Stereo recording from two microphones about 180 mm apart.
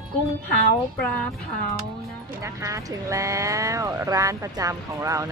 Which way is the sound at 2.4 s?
15° right (ahead or behind).